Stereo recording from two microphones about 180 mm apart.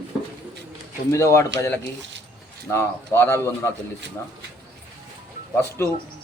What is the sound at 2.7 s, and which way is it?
A man's voice, 15° left (ahead or behind).